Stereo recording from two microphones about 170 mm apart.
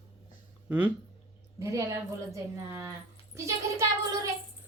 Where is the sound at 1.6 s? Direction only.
20° right (ahead or behind).